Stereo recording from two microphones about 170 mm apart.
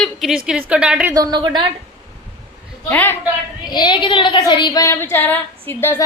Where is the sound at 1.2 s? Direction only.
25° right (ahead or behind).